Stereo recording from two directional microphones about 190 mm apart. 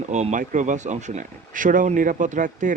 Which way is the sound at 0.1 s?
40° right (ahead or behind).